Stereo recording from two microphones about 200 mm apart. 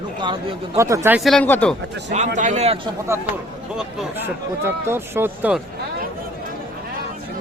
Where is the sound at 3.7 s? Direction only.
5° right (ahead or behind).